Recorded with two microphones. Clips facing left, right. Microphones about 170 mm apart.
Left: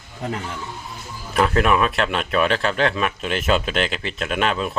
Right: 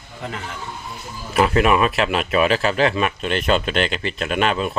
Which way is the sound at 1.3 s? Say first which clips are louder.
Right 2 dB; 5° right (ahead or behind).